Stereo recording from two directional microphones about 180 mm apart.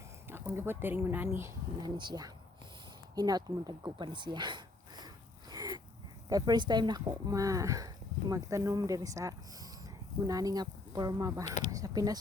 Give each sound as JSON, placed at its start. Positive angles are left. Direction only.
{"t": 0.3, "sound": "speech", "side_deg": -15}
{"t": 3.2, "sound": "a sound", "side_deg": -20}
{"t": 6.2, "sound": "speech", "side_deg": -20}